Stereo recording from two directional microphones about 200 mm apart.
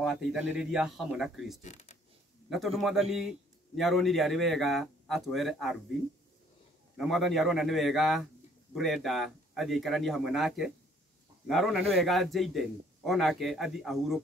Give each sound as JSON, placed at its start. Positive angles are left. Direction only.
{"t": 0.0, "sound": "a man's voice", "side_deg": 0}
{"t": 1.6, "sound": "speech", "side_deg": 35}
{"t": 2.5, "sound": "a man's voice", "side_deg": 0}
{"t": 7.0, "sound": "a man's voice", "side_deg": 0}